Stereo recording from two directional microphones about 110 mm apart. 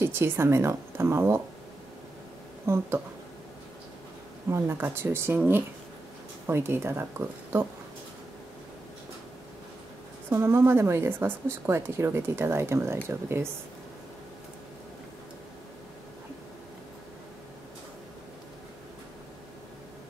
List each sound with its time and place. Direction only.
0.0 s speech: 20° right (ahead or behind)
2.6 s speech: 25° right (ahead or behind)
4.5 s speech: 20° right (ahead or behind)
6.4 s speech: 20° right (ahead or behind)
10.3 s speech: 25° right (ahead or behind)